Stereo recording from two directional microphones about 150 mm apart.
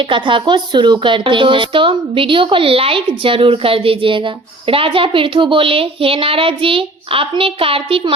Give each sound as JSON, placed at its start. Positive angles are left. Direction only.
{"t": 0.1, "sound": "speech", "side_deg": -35}